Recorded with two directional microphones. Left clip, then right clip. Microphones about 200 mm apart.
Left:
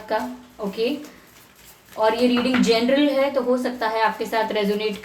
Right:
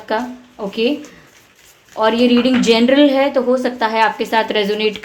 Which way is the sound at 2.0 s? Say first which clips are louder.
Right 5 dB; 50° right (ahead or behind).